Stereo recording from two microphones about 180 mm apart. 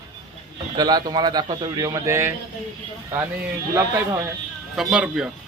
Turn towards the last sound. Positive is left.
turn(degrees=-5)  # may be behind; listen again after turning